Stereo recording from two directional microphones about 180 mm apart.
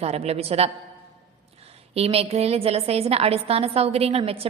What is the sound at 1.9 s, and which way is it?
A woman's voice, 35° right (ahead or behind).